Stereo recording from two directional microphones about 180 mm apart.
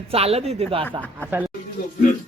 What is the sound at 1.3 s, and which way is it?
Speech, 10° right (ahead or behind).